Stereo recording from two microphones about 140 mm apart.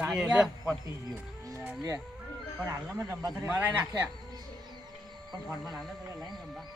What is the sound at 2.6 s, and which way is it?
Speech, 25° right (ahead or behind).